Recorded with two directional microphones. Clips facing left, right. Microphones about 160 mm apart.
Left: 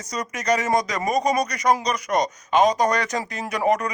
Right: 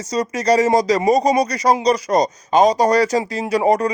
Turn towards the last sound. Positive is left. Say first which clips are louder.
# right 6 dB
turn(degrees=-30)  # may be behind; listen again after turning